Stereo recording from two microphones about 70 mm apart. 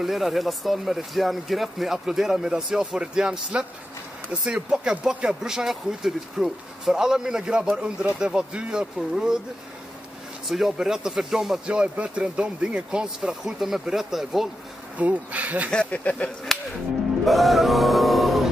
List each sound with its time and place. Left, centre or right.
0.0 s speech: centre
10.5 s speech: centre
11.7 s speech: centre
15.0 s bee: right
15.7 s speech: centre
16.5 s whip: centre
17.2 s music: centre